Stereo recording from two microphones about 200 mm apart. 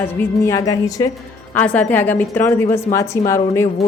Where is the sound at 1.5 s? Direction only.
5° left (ahead or behind).